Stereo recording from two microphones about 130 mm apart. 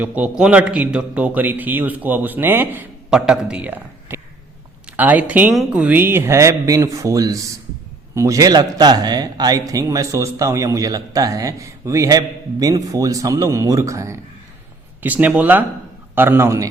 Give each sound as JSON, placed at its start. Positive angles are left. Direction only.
{"t": 0.0, "sound": "a man's voice", "side_deg": -10}
{"t": 15.0, "sound": "a man's voice", "side_deg": -10}